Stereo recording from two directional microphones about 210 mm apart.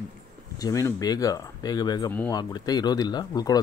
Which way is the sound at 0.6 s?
15° left (ahead or behind).